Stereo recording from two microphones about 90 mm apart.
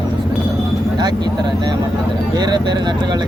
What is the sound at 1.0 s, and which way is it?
Speech, 50° right (ahead or behind).